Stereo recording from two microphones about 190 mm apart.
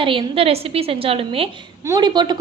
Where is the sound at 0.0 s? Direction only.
25° right (ahead or behind).